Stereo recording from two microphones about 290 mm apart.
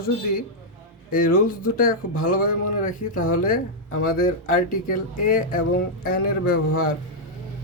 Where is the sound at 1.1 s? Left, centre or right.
Left.